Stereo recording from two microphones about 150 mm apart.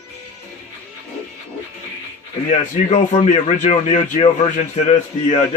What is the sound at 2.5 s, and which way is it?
A man's voice, 50° left (ahead or behind).